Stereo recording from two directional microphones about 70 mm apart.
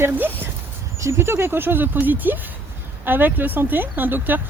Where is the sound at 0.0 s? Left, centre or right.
Right.